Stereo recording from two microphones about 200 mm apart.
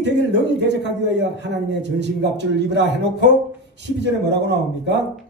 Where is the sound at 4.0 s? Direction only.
60° right (ahead or behind).